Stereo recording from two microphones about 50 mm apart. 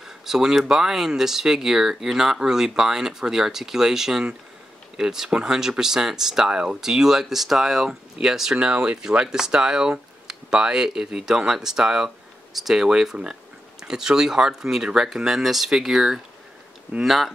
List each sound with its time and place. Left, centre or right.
0.0 s speech: centre